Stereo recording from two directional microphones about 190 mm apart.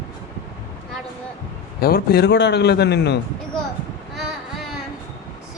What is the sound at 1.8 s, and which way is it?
A man's voice, 50° left (ahead or behind).